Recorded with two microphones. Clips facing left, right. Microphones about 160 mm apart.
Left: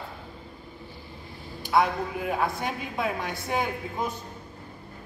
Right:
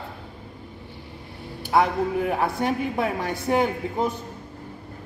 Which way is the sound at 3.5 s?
40° right (ahead or behind).